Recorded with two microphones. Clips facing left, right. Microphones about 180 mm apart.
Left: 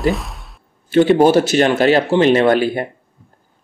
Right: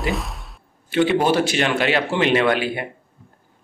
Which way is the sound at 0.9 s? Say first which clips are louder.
Left 7 dB; 40° left (ahead or behind).